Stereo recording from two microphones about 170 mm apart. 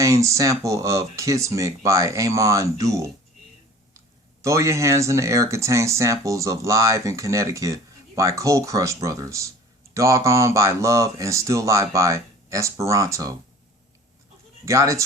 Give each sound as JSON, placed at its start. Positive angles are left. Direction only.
{"t": 0.0, "sound": "speech", "side_deg": -20}
{"t": 4.4, "sound": "speech", "side_deg": -15}
{"t": 14.6, "sound": "speech", "side_deg": -15}